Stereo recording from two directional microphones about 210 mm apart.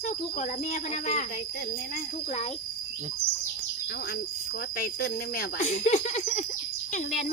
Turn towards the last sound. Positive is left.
turn(degrees=35)  # may be behind; listen again after turning